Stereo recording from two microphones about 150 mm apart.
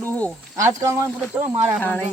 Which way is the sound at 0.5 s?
20° right (ahead or behind).